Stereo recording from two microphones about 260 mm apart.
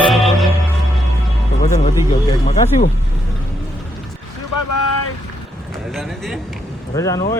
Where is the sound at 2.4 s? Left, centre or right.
Left.